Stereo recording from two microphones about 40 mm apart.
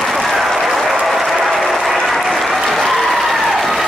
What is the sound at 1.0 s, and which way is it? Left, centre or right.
Applause, centre.